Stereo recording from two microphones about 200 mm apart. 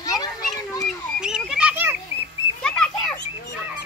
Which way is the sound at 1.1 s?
5° right (ahead or behind).